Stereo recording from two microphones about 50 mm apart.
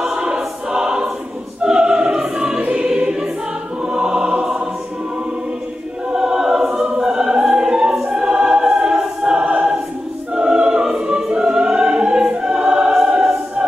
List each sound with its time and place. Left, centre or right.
0.0 s choir: centre
1.6 s opera: centre
2.3 s choir: centre
6.1 s choir: centre
10.3 s music: centre